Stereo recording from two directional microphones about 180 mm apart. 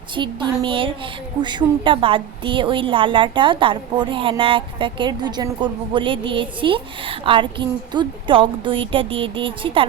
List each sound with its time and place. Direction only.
0.2 s a woman's voice: 25° right (ahead or behind)